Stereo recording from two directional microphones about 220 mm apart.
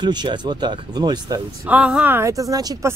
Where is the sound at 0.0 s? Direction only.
20° right (ahead or behind).